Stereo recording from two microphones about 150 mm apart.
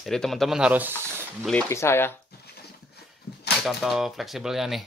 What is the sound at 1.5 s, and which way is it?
Speech, 15° left (ahead or behind).